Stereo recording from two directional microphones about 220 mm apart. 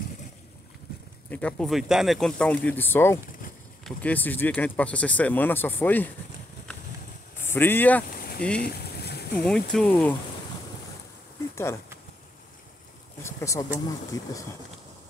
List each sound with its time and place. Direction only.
1.3 s speech: 5° left (ahead or behind)
7.4 s speech: 10° left (ahead or behind)
8.5 s boat: 45° left (ahead or behind)
9.4 s speech: centre (ahead or behind)
11.5 s speech: 10° left (ahead or behind)
13.2 s speech: 15° left (ahead or behind)